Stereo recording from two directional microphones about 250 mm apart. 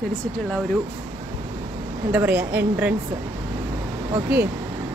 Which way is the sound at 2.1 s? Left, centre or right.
Centre.